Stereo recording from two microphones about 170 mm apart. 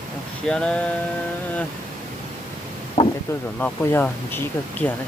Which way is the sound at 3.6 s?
10° left (ahead or behind).